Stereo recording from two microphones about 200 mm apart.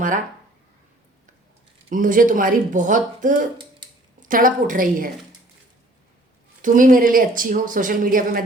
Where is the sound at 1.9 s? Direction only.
40° right (ahead or behind).